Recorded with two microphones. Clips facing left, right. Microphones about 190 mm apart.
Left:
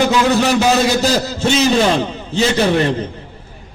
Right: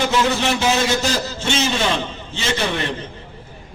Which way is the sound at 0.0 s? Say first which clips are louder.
Left 5 dB; 40° left (ahead or behind).